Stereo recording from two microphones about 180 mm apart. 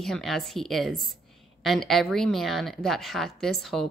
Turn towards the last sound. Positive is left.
turn(degrees=0)  # may be behind; listen again after turning